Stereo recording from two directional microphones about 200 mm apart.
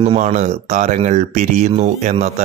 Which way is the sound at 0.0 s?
35° right (ahead or behind).